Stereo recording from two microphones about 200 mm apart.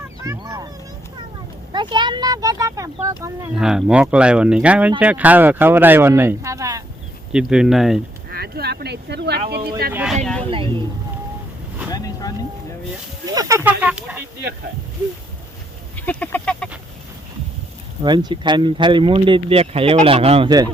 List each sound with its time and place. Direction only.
0.3 s speech: 20° right (ahead or behind)
1.7 s speech: 20° right (ahead or behind)
3.5 s speech: 5° right (ahead or behind)
7.3 s speech: 5° right (ahead or behind)
8.3 s speech: 50° right (ahead or behind)
9.9 s speech: 5° right (ahead or behind)
11.9 s boat: 20° left (ahead or behind)
13.3 s speech: 15° right (ahead or behind)
16.0 s speech: 10° left (ahead or behind)
18.0 s speech: 20° right (ahead or behind)